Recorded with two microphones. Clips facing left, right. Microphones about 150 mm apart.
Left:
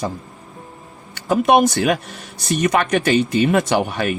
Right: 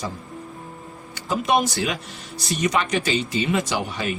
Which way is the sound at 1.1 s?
60° left (ahead or behind).